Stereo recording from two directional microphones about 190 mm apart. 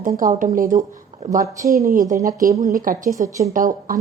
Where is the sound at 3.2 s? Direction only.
15° right (ahead or behind).